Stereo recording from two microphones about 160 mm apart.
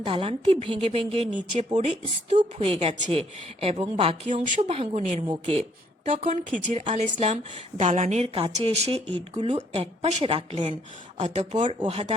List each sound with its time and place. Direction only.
0.0 s a woman's voice: 35° right (ahead or behind)
2.6 s speech: 35° right (ahead or behind)
4.7 s a woman's voice: 40° right (ahead or behind)